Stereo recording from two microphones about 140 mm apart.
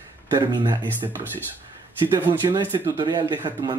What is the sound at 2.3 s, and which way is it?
Speech, 35° right (ahead or behind).